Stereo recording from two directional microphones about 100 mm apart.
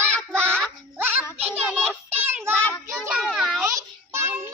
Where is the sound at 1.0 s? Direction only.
20° right (ahead or behind).